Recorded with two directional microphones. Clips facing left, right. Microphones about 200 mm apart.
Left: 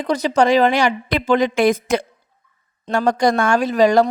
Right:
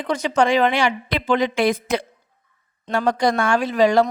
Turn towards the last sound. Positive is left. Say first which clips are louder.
# left 2 dB
turn(degrees=40)  # may be behind; listen again after turning